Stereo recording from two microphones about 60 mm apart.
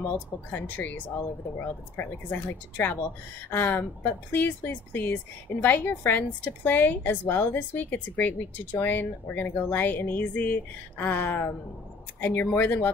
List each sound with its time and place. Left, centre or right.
0.0 s speech: left